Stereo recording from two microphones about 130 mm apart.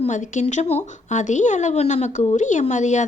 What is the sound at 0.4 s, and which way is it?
A woman's voice, 55° left (ahead or behind).